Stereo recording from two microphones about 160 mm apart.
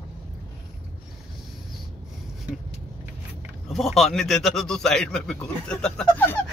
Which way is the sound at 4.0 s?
Centre (ahead or behind).